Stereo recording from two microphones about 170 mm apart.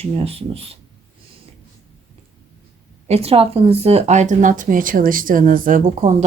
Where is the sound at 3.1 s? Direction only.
35° right (ahead or behind).